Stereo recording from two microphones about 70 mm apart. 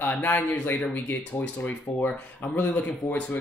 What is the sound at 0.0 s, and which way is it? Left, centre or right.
Speech, left.